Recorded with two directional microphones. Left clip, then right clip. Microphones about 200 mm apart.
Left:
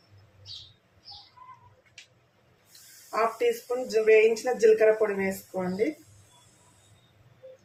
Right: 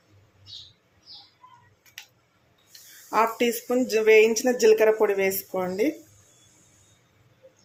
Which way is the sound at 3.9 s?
45° right (ahead or behind).